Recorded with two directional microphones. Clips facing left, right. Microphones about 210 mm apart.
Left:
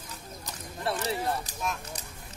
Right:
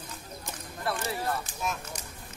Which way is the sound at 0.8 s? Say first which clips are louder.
Left 2 dB; 25° left (ahead or behind).